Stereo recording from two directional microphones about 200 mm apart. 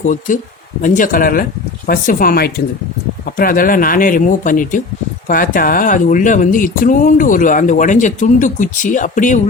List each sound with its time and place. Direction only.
0.0 s speech: 40° left (ahead or behind)